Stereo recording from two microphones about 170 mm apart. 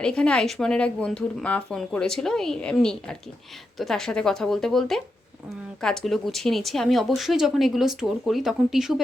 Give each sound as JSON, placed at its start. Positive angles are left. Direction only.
{"t": 0.0, "sound": "speech", "side_deg": 5}